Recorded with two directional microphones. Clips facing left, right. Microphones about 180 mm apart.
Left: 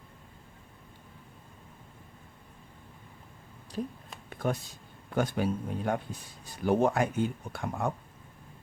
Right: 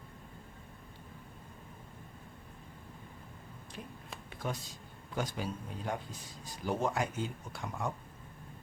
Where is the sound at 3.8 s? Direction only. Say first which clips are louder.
Left 13 dB; 35° left (ahead or behind).